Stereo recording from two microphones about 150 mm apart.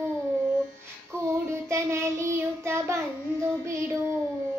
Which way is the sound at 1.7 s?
20° right (ahead or behind).